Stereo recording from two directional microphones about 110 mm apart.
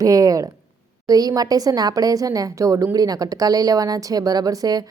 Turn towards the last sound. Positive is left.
turn(degrees=-35)  # may be behind; listen again after turning